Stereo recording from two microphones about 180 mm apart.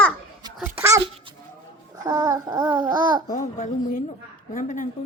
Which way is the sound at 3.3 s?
45° left (ahead or behind).